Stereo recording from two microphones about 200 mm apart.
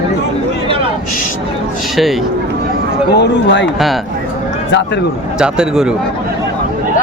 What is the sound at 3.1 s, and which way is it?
Speech, 60° left (ahead or behind).